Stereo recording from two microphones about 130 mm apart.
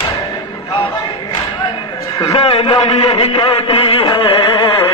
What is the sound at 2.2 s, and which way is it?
A man's voice, 40° left (ahead or behind).